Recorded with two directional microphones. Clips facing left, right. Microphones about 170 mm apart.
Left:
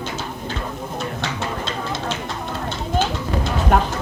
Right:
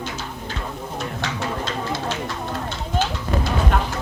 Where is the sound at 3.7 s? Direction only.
45° left (ahead or behind).